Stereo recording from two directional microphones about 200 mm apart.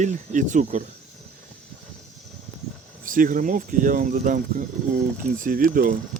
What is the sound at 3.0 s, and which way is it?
Speech, 45° right (ahead or behind).